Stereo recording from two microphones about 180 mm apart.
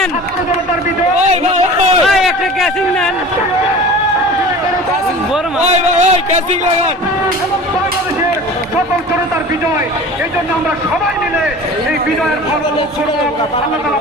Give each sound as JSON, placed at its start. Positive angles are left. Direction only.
{"t": 2.0, "sound": "a man's voice", "side_deg": 0}
{"t": 5.6, "sound": "a man's voice", "side_deg": -35}